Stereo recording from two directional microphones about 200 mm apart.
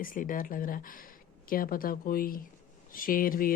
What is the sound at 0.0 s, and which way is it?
A woman's voice, 45° left (ahead or behind).